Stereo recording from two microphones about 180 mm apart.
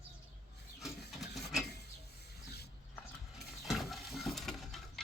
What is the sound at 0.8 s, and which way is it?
Filing, centre (ahead or behind).